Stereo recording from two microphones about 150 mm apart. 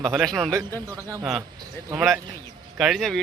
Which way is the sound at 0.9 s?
20° right (ahead or behind).